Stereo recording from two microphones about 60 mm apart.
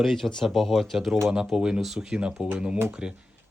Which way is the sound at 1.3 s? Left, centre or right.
Centre.